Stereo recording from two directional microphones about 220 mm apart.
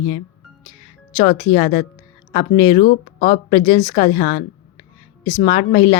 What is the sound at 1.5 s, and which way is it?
A woman's voice, 25° left (ahead or behind).